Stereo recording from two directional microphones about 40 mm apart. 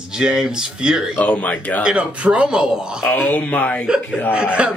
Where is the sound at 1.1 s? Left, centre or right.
Left.